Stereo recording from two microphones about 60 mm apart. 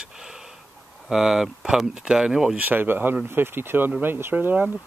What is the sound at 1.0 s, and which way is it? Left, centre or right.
Speech, centre.